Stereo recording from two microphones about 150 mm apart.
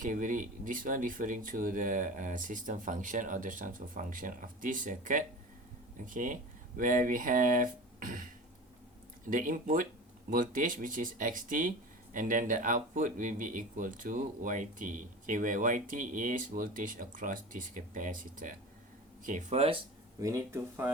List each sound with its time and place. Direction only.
0.0 s speech: 60° right (ahead or behind)
9.3 s speech: 65° right (ahead or behind); by 19.8 s 45° right (ahead or behind)
20.1 s speech: 20° right (ahead or behind)